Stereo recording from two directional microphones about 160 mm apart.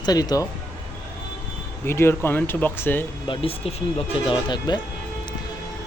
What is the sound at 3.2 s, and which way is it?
Speech, 35° left (ahead or behind).